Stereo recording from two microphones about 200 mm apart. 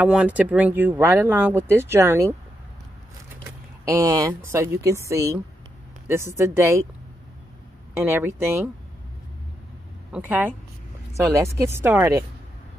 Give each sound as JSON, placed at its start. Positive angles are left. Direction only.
{"t": 0.0, "sound": "speech", "side_deg": -5}
{"t": 3.8, "sound": "speech", "side_deg": -15}
{"t": 8.0, "sound": "speech", "side_deg": -10}
{"t": 10.1, "sound": "speech", "side_deg": -10}